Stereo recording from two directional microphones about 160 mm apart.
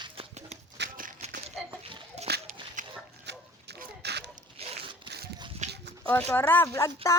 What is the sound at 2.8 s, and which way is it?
Dog, 55° right (ahead or behind).